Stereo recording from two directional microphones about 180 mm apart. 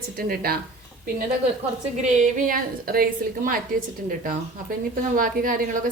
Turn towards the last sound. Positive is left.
turn(degrees=-50)  # may be behind; listen again after turning